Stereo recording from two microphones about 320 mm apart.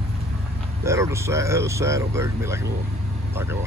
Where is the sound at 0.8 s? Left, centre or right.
Centre.